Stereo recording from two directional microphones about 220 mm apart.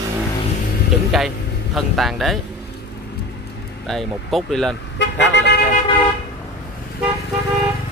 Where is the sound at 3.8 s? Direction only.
Centre (ahead or behind).